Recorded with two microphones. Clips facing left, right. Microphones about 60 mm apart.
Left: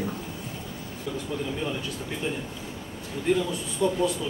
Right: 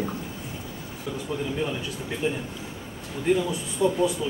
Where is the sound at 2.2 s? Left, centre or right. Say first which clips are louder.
Right 4 dB; centre.